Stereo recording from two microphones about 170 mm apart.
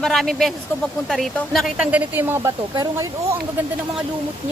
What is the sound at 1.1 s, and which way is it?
Speech, centre (ahead or behind).